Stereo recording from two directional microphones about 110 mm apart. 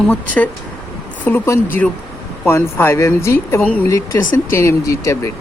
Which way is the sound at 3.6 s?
15° left (ahead or behind).